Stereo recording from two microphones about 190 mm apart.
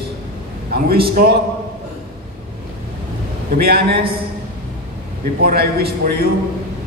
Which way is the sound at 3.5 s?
55° right (ahead or behind).